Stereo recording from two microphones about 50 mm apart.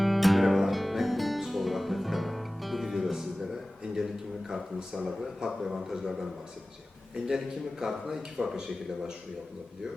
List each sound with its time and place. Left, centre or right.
0.0 s music: centre
5.0 s a man's voice: centre
7.3 s a man's voice: centre